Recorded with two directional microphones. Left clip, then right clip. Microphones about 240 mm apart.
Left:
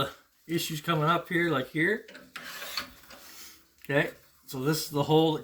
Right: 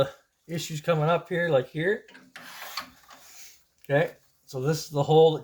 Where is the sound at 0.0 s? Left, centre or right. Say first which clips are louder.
Right 6 dB; right.